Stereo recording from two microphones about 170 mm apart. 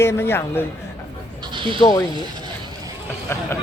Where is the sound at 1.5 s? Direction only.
30° right (ahead or behind).